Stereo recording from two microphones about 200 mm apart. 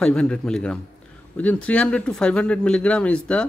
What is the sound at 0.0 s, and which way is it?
Speech, 5° left (ahead or behind).